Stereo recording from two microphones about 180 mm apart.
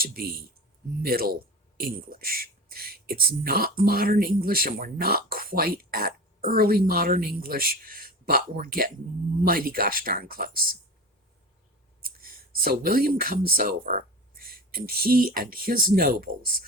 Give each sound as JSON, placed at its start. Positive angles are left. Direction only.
{"t": 0.0, "sound": "a sound", "side_deg": -55}
{"t": 1.0, "sound": "speech", "side_deg": -55}
{"t": 12.0, "sound": "speech", "side_deg": -55}